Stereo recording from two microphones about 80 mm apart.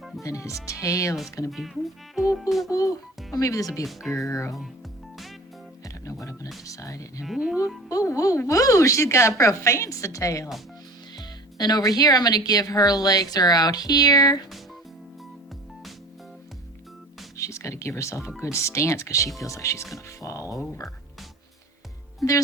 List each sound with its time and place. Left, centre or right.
0.2 s a woman's voice: left
1.5 s speech: centre
2.6 s speech: left
3.8 s speech: centre
4.3 s a woman's voice: left
6.7 s speech: left
7.3 s music: centre
7.9 s a woman's voice: left
11.2 s speech: left
17.3 s a woman's voice: left